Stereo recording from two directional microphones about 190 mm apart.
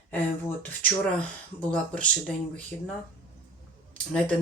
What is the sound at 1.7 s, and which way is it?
Speech, 5° left (ahead or behind).